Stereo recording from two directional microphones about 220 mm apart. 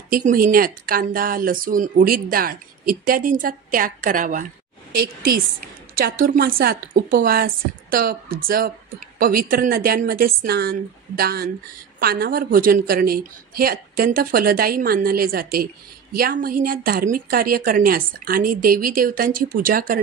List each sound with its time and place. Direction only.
0.1 s a woman's voice: 40° right (ahead or behind)